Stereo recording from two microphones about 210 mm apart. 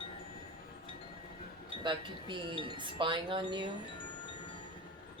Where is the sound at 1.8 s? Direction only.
25° right (ahead or behind).